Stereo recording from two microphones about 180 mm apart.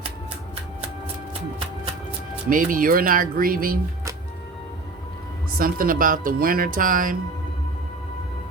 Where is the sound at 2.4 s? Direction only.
50° right (ahead or behind).